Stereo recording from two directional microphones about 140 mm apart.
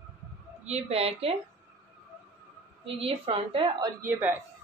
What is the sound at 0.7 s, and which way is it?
Speech, 50° right (ahead or behind).